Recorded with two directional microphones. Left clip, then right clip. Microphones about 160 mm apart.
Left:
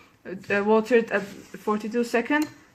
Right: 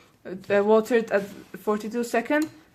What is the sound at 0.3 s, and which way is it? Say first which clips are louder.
A woman's voice: right 2 dB; 30° right (ahead or behind).